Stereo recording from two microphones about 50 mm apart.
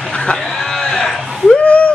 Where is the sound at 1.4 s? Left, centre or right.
Left.